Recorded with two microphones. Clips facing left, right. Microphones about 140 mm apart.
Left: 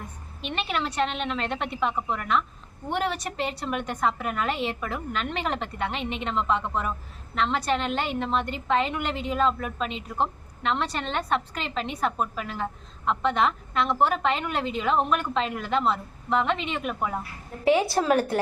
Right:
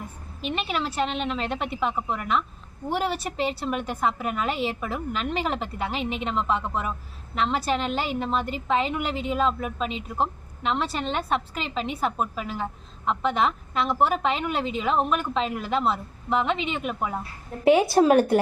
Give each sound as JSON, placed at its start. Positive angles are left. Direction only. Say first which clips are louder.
{"t": 0.4, "sound": "a woman's voice", "louder": "right 1 dB", "side_deg": 0}